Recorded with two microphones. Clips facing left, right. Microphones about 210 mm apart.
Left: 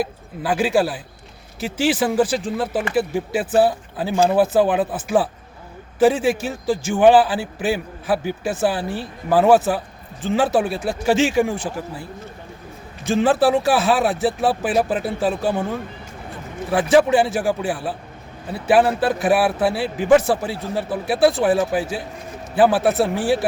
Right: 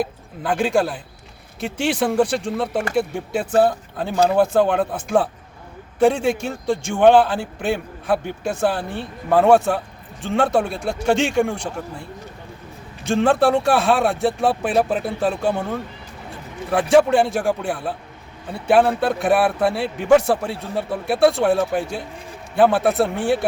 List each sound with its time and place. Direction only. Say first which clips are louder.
0.0 s a man's voice: even; 5° left (ahead or behind)
13.1 s a man's voice: even; 5° left (ahead or behind)